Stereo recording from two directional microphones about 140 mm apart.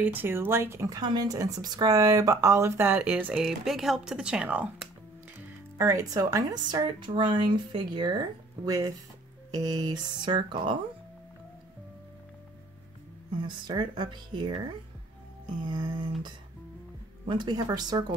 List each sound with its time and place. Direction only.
0.0 s speech: 15° right (ahead or behind)
5.8 s a woman's voice: 25° right (ahead or behind)
13.4 s speech: 35° right (ahead or behind)
17.3 s a woman's voice: 30° right (ahead or behind)